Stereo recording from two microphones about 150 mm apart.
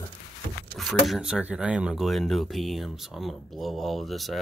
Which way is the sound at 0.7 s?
Centre (ahead or behind).